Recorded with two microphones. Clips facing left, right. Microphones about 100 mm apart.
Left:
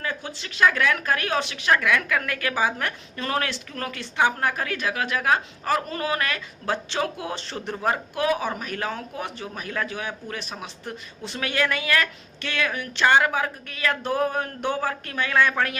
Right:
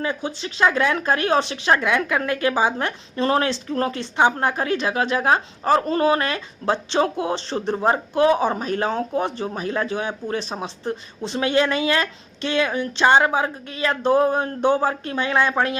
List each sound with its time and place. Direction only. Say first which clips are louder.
0.0 s speech: right 6 dB; 20° right (ahead or behind)